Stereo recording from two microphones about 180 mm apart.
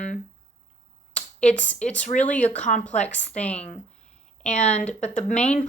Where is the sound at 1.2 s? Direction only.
40° left (ahead or behind).